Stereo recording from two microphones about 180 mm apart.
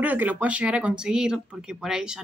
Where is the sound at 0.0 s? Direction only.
10° right (ahead or behind).